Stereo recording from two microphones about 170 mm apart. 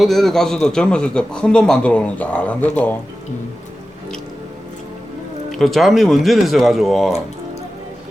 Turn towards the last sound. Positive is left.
turn(degrees=0)  # may be behind; listen again after turning